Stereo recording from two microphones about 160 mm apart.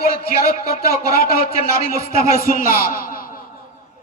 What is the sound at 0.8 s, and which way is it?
Speech, 70° left (ahead or behind).